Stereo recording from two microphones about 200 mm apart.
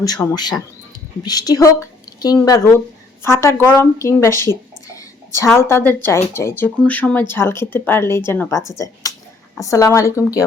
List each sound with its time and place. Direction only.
0.3 s a woman's voice: 20° left (ahead or behind)
9.0 s a sound: 15° left (ahead or behind)
9.6 s speech: 15° left (ahead or behind)